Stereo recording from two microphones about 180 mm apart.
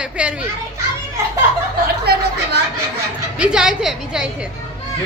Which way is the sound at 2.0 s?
65° right (ahead or behind).